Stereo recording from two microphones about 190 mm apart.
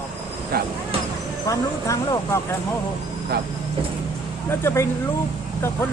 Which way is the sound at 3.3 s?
60° right (ahead or behind).